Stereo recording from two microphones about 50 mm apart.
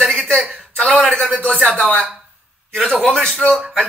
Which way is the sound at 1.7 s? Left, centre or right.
Centre.